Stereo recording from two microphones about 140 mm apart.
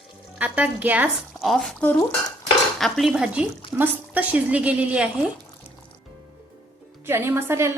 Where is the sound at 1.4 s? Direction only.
Centre (ahead or behind).